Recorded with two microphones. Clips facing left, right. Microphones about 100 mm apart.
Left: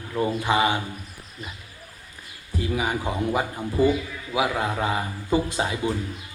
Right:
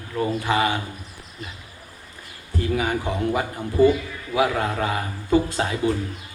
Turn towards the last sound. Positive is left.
turn(degrees=10)  # may be behind; listen again after turning